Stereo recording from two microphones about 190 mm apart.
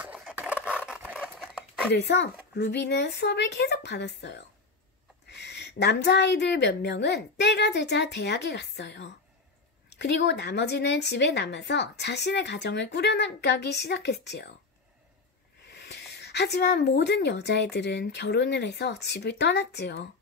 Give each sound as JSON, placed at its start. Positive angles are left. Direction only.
{"t": 0.0, "sound": "a sound", "side_deg": -5}
{"t": 2.0, "sound": "speech", "side_deg": 65}
{"t": 15.7, "sound": "speech", "side_deg": 60}